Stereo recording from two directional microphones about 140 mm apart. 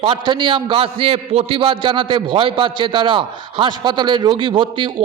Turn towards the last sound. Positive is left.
turn(degrees=-35)  # may be behind; listen again after turning